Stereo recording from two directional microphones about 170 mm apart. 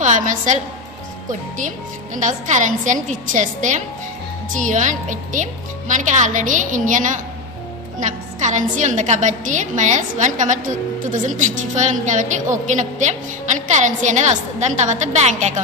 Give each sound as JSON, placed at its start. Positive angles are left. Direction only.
{"t": 0.0, "sound": "a woman's voice", "side_deg": -50}
{"t": 2.1, "sound": "a woman's voice", "side_deg": -45}